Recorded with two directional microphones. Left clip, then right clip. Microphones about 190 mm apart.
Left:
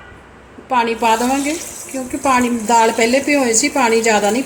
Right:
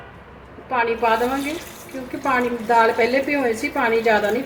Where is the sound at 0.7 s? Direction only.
50° left (ahead or behind).